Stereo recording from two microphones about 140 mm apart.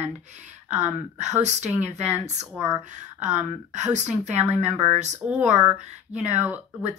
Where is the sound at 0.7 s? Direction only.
55° right (ahead or behind).